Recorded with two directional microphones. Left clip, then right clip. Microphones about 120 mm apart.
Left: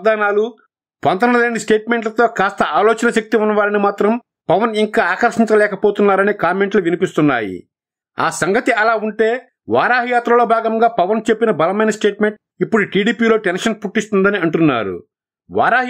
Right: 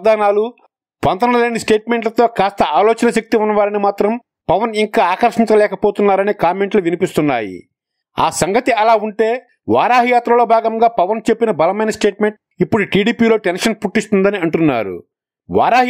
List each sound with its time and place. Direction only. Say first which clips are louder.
0.0 s speech: right 2 dB; 35° right (ahead or behind)